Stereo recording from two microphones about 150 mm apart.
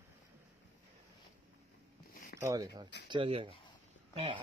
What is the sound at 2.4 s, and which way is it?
Speech, 20° right (ahead or behind).